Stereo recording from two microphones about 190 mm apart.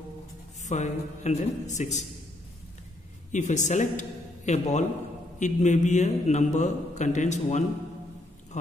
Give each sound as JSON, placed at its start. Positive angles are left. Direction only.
{"t": 0.6, "sound": "a man's voice", "side_deg": 40}
{"t": 3.3, "sound": "a man's voice", "side_deg": 40}